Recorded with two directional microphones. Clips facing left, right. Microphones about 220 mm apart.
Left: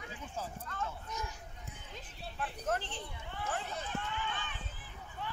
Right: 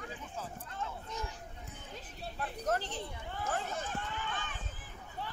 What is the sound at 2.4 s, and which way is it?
Run, 40° right (ahead or behind).